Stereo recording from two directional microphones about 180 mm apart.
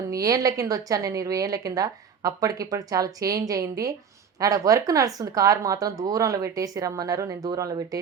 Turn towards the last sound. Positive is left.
turn(degrees=-20)  # may be behind; listen again after turning